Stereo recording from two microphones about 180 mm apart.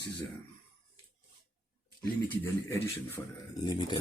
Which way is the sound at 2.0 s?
10° left (ahead or behind).